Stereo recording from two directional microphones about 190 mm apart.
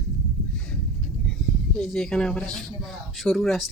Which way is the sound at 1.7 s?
Centre (ahead or behind).